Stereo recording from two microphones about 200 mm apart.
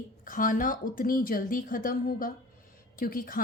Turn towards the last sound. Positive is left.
turn(degrees=45)  # may be behind; listen again after turning